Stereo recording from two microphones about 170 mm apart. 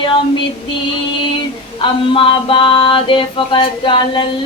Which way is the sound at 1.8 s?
30° left (ahead or behind).